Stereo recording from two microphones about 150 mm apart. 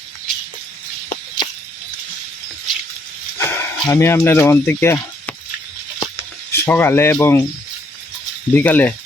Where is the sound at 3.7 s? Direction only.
30° left (ahead or behind).